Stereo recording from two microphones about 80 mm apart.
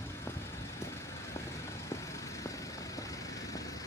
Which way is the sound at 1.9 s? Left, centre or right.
Left.